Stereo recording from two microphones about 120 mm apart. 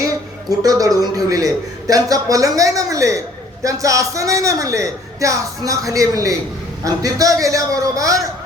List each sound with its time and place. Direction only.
0.0 s music: 30° right (ahead or behind)
1.1 s a man's voice: 30° right (ahead or behind)